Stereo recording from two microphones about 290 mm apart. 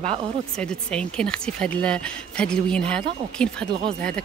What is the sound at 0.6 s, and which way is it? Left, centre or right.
Speech, centre.